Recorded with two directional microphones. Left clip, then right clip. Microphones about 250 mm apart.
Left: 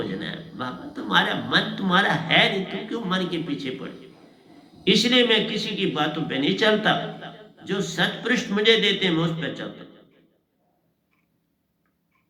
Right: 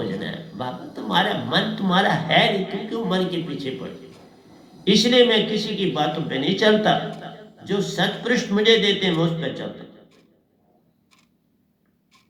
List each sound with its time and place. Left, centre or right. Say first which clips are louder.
0.0 s speech: right 2 dB; left
4.9 s a man's voice: right 2 dB; left